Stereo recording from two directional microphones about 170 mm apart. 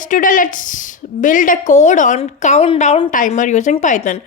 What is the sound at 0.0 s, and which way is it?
A woman's voice, 50° left (ahead or behind).